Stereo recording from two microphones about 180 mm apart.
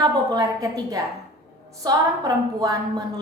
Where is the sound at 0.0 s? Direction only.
20° right (ahead or behind).